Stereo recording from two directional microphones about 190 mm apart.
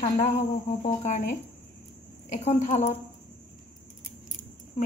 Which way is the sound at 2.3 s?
35° left (ahead or behind).